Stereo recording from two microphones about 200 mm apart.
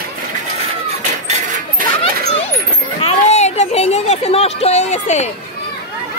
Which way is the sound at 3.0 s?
35° left (ahead or behind).